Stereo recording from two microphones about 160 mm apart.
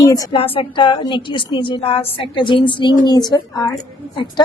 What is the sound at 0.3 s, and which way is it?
A woman's voice, 35° left (ahead or behind).